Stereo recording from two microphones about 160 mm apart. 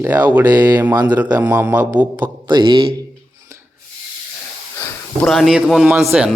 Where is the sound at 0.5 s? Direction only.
25° right (ahead or behind).